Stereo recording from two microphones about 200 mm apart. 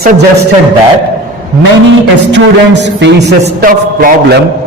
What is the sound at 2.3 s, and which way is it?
Speech, 60° right (ahead or behind).